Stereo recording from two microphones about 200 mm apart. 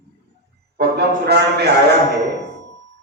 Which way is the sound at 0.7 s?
55° right (ahead or behind).